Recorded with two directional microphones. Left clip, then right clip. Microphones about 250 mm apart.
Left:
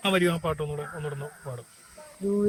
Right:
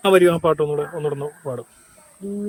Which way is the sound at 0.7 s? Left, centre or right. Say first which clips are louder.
Right 11 dB; right.